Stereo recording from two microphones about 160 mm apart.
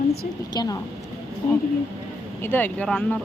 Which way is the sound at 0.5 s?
25° left (ahead or behind).